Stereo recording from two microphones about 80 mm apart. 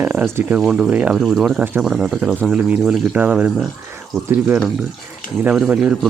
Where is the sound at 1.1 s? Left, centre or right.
Centre.